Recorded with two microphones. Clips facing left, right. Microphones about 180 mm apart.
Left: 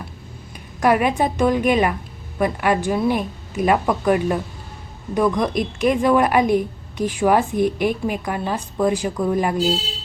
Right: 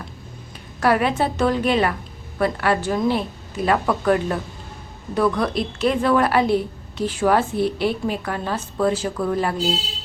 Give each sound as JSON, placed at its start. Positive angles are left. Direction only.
{"t": 0.8, "sound": "a woman's voice", "side_deg": 15}